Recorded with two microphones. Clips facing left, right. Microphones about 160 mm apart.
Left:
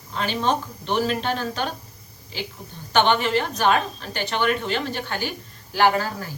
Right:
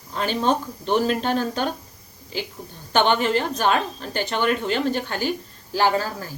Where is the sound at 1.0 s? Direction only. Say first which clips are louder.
Right 3 dB; 40° right (ahead or behind).